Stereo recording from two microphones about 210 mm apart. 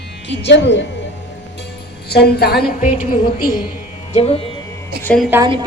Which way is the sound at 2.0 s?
50° left (ahead or behind).